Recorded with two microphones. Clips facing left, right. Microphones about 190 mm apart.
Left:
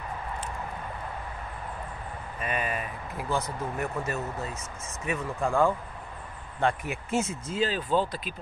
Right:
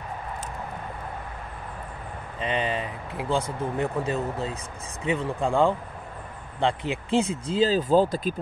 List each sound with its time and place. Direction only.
2.4 s speech: 25° right (ahead or behind)
5.0 s speech: 15° right (ahead or behind)
6.8 s speech: 30° right (ahead or behind)